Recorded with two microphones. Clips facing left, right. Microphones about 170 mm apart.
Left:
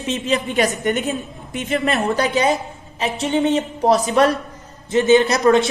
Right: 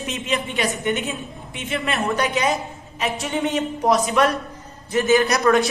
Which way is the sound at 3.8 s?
30° left (ahead or behind).